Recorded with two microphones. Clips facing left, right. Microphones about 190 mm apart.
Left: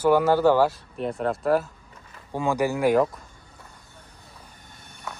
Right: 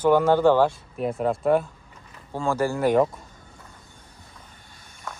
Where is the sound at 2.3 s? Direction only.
15° left (ahead or behind).